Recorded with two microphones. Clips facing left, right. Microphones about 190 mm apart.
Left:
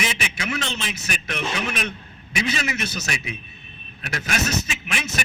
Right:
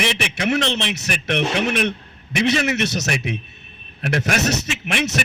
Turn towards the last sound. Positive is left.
turn(degrees=-65)  # may be behind; listen again after turning